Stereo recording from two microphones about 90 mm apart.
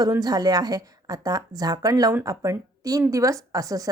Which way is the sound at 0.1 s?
45° right (ahead or behind).